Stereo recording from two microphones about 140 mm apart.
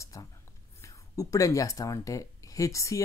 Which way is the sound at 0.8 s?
25° left (ahead or behind).